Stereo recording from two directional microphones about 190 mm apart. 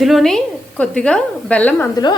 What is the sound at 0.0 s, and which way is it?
Speech, centre (ahead or behind).